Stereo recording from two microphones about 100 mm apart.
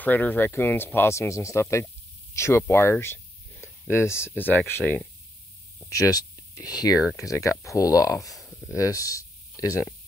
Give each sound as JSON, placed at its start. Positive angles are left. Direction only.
{"t": 0.0, "sound": "speech", "side_deg": 15}
{"t": 5.9, "sound": "speech", "side_deg": 35}